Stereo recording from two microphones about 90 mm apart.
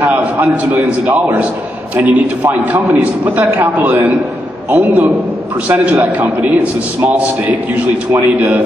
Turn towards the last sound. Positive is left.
turn(degrees=-15)  # may be behind; listen again after turning